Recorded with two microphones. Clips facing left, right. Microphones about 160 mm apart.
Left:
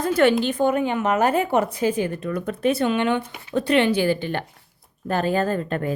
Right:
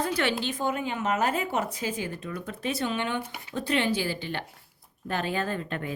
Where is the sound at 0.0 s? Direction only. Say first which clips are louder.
Left 9 dB; 50° left (ahead or behind).